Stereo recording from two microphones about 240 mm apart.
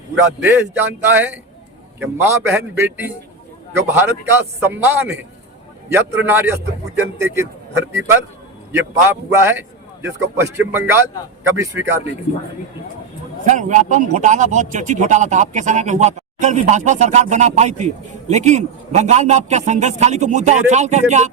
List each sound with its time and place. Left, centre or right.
0.3 s a man's voice: centre
13.4 s a man's voice: right